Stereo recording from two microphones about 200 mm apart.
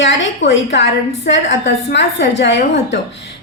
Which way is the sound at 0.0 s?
70° left (ahead or behind).